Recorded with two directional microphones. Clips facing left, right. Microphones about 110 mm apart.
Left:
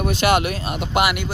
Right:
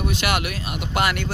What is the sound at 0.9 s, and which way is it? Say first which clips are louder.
Speech: left 3 dB; 10° left (ahead or behind).